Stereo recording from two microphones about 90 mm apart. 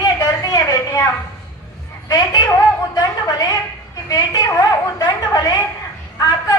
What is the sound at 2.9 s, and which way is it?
A woman's voice, 45° left (ahead or behind).